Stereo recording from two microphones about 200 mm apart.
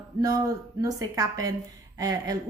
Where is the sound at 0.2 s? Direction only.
20° right (ahead or behind).